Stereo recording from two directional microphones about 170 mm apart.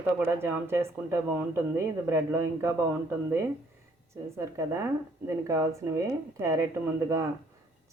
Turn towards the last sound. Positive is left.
turn(degrees=-15)  # may be behind; listen again after turning